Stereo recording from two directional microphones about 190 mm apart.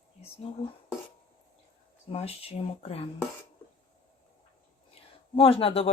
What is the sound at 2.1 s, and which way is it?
Speech, 30° left (ahead or behind).